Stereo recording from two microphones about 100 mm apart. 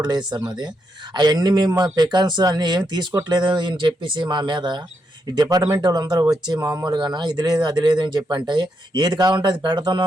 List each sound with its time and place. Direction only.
0.0 s speech: 45° right (ahead or behind)